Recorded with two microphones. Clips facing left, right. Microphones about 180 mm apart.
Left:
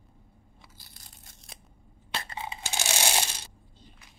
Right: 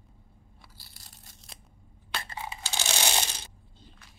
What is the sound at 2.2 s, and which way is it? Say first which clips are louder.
Coin: left 1 dB; 20° left (ahead or behind).